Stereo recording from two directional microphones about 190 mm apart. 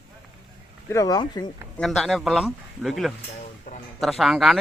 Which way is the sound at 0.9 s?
20° left (ahead or behind).